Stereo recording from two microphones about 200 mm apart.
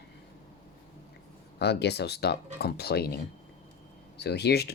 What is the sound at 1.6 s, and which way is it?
Speech, 55° left (ahead or behind).